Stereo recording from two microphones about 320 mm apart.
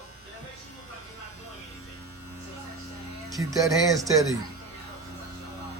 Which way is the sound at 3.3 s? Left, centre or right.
Centre.